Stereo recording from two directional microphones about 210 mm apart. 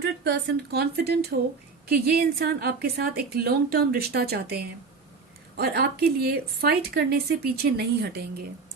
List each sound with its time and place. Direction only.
0.0 s a woman's voice: 50° right (ahead or behind)